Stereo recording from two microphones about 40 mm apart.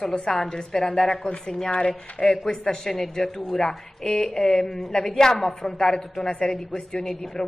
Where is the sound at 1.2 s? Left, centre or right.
Left.